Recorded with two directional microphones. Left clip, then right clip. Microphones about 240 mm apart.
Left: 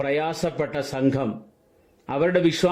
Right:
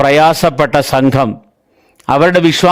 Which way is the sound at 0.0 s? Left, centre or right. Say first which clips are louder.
Right 16 dB; right.